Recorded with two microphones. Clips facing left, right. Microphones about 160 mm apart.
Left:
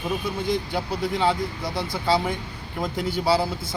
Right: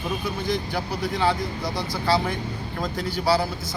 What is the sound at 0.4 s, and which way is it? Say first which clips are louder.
A man's voice: left 1 dB; 25° left (ahead or behind).